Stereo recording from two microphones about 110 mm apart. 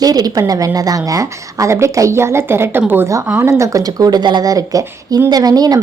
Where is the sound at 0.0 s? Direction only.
35° right (ahead or behind).